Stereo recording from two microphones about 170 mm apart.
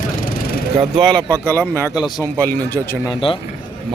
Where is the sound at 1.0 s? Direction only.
5° left (ahead or behind).